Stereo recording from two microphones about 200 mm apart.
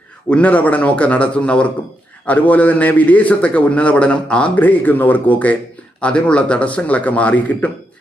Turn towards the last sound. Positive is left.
turn(degrees=5)  # may be behind; listen again after turning